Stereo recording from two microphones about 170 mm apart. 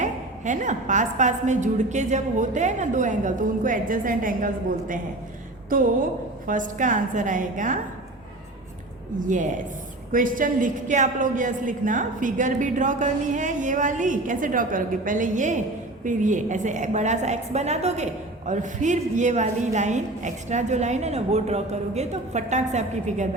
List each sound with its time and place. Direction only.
0.0 s a woman's voice: 45° right (ahead or behind)
6.5 s a woman's voice: 50° right (ahead or behind)
9.2 s a woman's voice: 50° right (ahead or behind)